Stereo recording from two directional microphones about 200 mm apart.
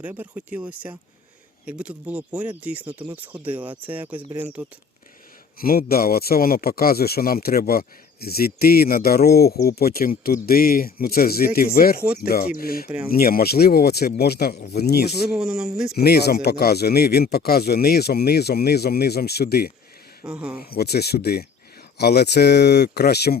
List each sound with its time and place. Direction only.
0.0 s speech: 5° right (ahead or behind)
5.5 s speech: 50° left (ahead or behind)
12.0 s speech: 5° right (ahead or behind)
12.3 s speech: 45° left (ahead or behind)
15.0 s speech: centre (ahead or behind)
16.0 s speech: 50° left (ahead or behind)
20.2 s speech: 5° right (ahead or behind)
20.6 s speech: 50° left (ahead or behind)